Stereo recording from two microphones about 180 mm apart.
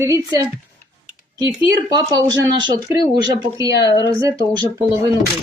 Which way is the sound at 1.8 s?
20° right (ahead or behind).